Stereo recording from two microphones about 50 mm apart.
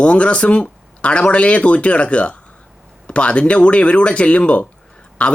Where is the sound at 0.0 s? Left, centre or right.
Left.